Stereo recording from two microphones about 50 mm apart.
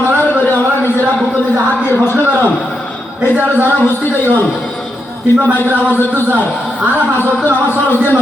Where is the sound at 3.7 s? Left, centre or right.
Left.